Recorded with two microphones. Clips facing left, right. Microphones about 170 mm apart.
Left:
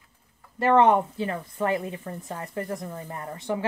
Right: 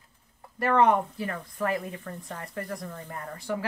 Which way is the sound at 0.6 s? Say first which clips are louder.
Left 3 dB; 25° left (ahead or behind).